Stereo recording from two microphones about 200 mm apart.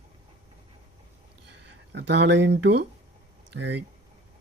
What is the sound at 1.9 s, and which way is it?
Speech, 60° right (ahead or behind).